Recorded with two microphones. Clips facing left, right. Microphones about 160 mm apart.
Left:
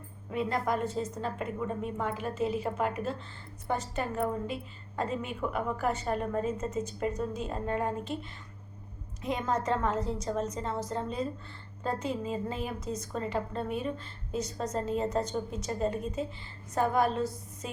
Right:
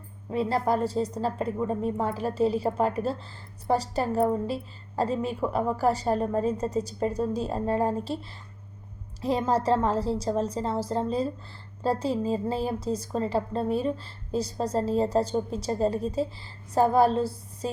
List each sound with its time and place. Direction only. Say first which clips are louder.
0.3 s a woman's voice: right 5 dB; 30° right (ahead or behind)